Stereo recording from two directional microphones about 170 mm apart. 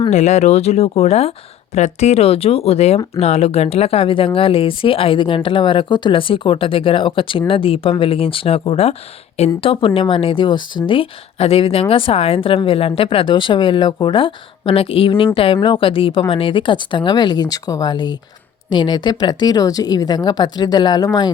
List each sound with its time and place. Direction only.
0.1 s a woman's voice: 40° left (ahead or behind); by 21.3 s 20° left (ahead or behind)